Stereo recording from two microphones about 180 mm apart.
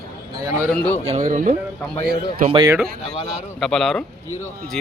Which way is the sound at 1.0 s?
35° right (ahead or behind).